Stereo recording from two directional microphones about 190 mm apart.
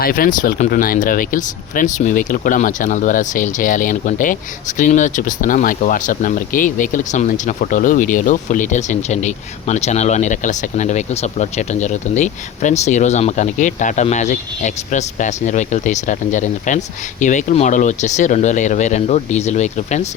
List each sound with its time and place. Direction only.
0.0 s speech: 50° left (ahead or behind)